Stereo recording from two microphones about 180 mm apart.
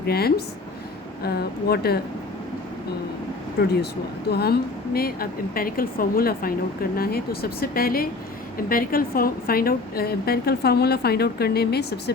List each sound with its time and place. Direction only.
0.0 s a woman's voice: 60° left (ahead or behind)
3.6 s a woman's voice: 65° left (ahead or behind)